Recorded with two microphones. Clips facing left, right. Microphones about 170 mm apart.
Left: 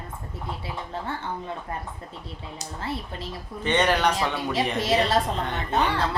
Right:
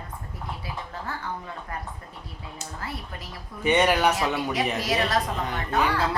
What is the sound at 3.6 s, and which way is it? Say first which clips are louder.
Speech: right 1 dB; 10° right (ahead or behind).